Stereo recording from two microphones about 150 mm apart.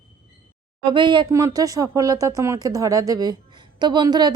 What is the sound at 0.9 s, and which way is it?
A woman's voice, 30° right (ahead or behind).